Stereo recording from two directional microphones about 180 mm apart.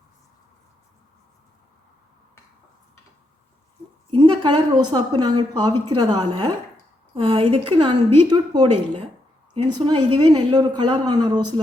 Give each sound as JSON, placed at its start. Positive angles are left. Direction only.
{"t": 4.1, "sound": "a woman's voice", "side_deg": -30}